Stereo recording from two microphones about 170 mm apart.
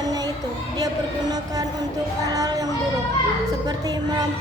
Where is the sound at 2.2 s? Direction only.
20° right (ahead or behind).